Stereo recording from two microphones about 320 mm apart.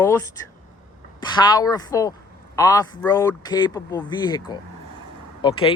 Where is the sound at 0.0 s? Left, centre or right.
Centre.